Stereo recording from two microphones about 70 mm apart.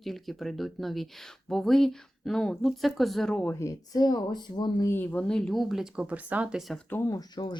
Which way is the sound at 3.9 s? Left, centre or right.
Left.